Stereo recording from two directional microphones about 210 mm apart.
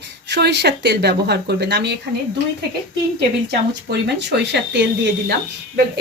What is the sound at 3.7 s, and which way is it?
A woman's voice, 55° right (ahead or behind).